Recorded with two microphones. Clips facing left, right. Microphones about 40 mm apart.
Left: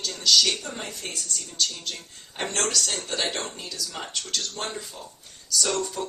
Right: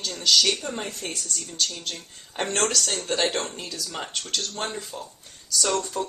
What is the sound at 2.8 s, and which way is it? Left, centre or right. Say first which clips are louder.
Speech: right 3 dB; centre.